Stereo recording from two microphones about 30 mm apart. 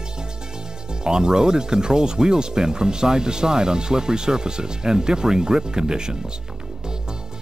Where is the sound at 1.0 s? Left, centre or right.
Right.